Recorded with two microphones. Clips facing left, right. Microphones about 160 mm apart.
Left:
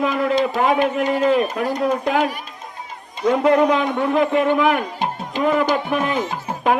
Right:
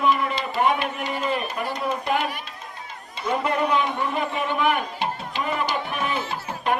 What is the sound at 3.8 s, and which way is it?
Speech, 55° left (ahead or behind).